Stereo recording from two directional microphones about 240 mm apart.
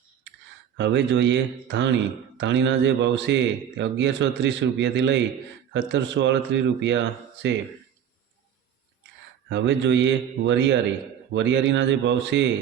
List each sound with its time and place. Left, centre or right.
0.8 s a man's voice: right
9.5 s a man's voice: right